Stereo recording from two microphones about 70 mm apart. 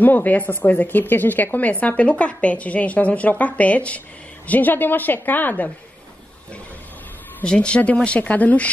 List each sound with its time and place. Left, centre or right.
0.0 s speech: left
7.4 s speech: centre